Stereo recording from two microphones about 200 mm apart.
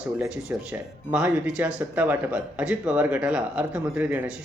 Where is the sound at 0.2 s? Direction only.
5° right (ahead or behind).